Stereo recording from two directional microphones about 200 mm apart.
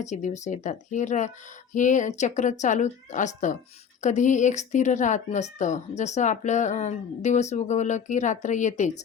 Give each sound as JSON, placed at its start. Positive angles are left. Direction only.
{"t": 0.0, "sound": "speech", "side_deg": 35}